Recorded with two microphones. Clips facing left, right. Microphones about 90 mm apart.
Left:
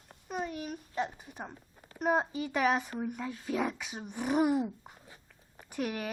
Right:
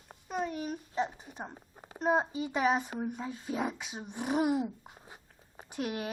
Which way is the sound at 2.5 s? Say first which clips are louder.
Even; 25° right (ahead or behind).